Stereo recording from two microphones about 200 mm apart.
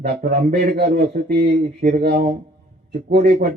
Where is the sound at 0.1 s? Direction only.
55° right (ahead or behind).